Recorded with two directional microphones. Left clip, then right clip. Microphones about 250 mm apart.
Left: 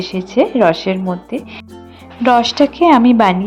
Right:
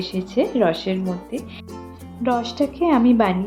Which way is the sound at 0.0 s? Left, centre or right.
Left.